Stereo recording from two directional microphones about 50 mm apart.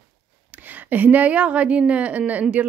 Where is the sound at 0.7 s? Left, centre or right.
Right.